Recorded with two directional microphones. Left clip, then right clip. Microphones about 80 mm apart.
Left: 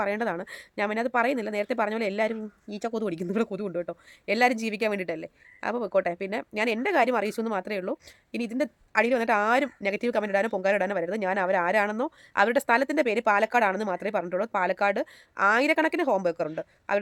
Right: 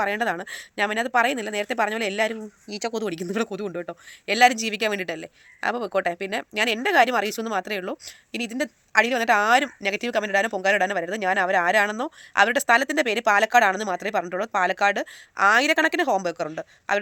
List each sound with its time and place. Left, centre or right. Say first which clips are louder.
0.0 s a woman's voice: right 4 dB; left
2.6 s speech: right 4 dB; centre
2.9 s a woman's voice: even; left